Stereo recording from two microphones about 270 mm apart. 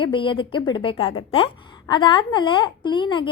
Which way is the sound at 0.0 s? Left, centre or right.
Centre.